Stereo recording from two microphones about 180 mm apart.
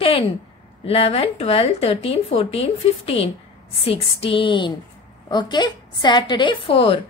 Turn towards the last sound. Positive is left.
turn(degrees=30)  # may be behind; listen again after turning